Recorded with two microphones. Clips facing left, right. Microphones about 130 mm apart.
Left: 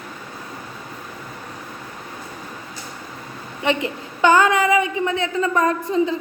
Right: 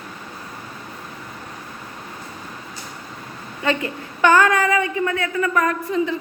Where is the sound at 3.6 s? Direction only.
20° left (ahead or behind).